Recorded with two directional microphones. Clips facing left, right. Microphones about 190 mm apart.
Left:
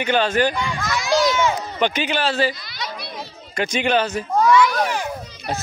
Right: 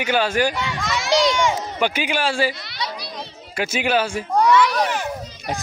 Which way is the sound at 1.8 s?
10° right (ahead or behind).